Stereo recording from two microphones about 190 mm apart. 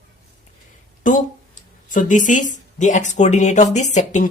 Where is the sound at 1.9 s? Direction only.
45° left (ahead or behind).